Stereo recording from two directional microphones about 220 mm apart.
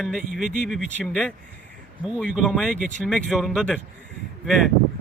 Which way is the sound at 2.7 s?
35° right (ahead or behind).